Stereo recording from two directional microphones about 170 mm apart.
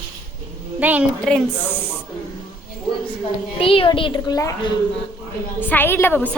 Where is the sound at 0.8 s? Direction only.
10° right (ahead or behind).